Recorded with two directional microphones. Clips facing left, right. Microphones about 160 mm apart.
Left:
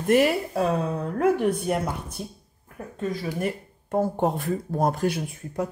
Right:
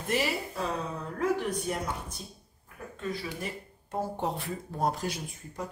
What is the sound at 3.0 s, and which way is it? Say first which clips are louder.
Speech: left 8 dB; 50° left (ahead or behind).